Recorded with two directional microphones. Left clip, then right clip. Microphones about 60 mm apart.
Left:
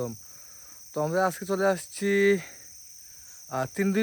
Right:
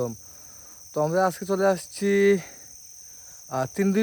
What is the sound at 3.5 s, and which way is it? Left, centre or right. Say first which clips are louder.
Speech: right 3 dB; right.